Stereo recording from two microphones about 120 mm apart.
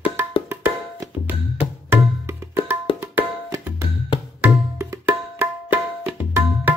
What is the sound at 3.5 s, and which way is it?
Tabla, 20° right (ahead or behind).